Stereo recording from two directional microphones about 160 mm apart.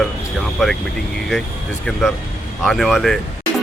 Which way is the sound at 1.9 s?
Centre (ahead or behind).